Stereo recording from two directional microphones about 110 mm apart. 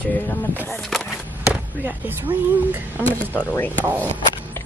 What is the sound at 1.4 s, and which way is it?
Speech, 15° right (ahead or behind).